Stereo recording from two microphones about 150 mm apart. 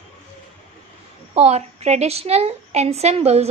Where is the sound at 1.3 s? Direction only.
45° right (ahead or behind).